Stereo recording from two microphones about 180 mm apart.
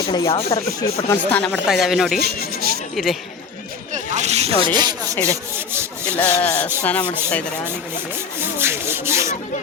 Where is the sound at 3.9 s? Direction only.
40° right (ahead or behind).